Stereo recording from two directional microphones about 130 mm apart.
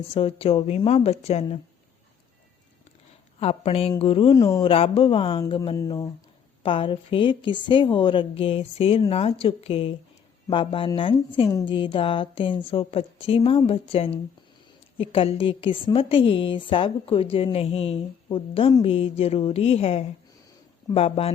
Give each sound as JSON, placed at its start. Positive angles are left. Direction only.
{"t": 0.1, "sound": "a woman's voice", "side_deg": 45}
{"t": 3.4, "sound": "a woman's voice", "side_deg": 50}
{"t": 4.4, "sound": "speech", "side_deg": 25}
{"t": 4.6, "sound": "a woman's voice", "side_deg": 45}
{"t": 5.7, "sound": "speech", "side_deg": 25}
{"t": 6.6, "sound": "a woman's voice", "side_deg": 40}